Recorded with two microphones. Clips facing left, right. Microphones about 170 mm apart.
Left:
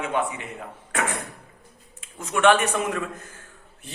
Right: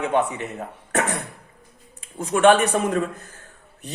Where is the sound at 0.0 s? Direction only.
40° right (ahead or behind).